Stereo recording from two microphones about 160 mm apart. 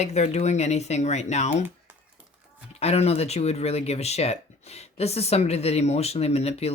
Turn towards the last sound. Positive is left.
turn(degrees=40)  # may be behind; listen again after turning